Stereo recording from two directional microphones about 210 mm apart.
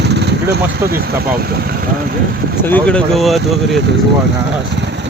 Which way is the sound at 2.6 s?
5° left (ahead or behind).